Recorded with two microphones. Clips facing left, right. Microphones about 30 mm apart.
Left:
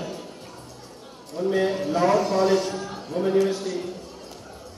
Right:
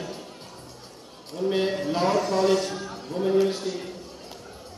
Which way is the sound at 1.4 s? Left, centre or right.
Centre.